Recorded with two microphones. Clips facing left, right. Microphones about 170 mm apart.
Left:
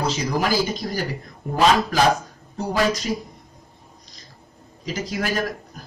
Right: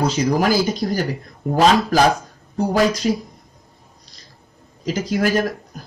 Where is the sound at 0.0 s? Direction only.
45° right (ahead or behind).